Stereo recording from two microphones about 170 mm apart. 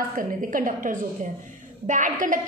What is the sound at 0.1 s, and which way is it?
A woman's voice, 50° right (ahead or behind).